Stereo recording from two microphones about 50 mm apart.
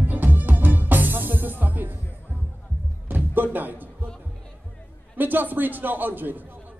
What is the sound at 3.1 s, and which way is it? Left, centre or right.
Music, right.